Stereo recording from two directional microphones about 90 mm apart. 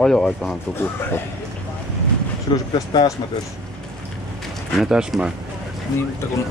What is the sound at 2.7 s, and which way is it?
Speech, 40° left (ahead or behind).